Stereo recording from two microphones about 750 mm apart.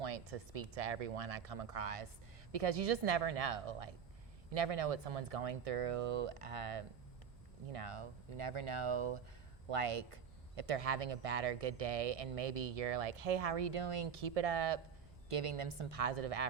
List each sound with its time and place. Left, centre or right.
0.0 s speech: right